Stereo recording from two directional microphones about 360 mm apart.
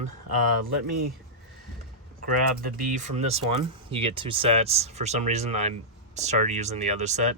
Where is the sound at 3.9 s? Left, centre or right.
Centre.